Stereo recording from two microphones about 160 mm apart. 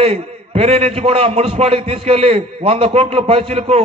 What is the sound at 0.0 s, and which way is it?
A man's voice, 40° right (ahead or behind).